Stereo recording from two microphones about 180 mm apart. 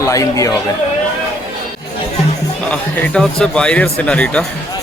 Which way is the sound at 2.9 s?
5° left (ahead or behind).